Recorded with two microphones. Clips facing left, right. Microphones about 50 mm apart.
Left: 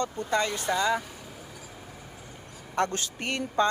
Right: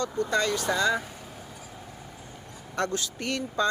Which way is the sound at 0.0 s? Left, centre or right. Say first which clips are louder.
Right 1 dB; left.